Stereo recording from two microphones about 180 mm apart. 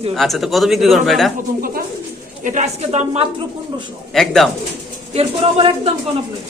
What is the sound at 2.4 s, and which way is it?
Speech, 40° right (ahead or behind).